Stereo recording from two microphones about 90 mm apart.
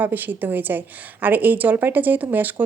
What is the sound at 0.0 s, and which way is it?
Speech, 20° right (ahead or behind).